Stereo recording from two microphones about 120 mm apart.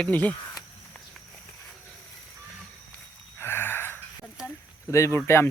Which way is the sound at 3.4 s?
20° left (ahead or behind).